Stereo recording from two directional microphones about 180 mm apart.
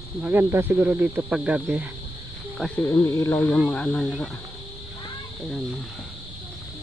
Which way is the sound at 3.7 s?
5° left (ahead or behind).